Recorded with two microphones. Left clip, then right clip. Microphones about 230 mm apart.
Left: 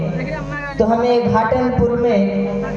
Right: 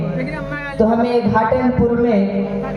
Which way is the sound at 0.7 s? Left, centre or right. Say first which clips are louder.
Left 1 dB; left.